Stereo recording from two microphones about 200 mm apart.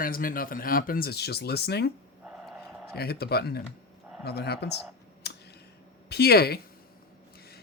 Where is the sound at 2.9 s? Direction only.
50° left (ahead or behind).